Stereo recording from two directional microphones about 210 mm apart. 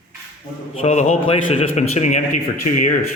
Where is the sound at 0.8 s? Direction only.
35° left (ahead or behind).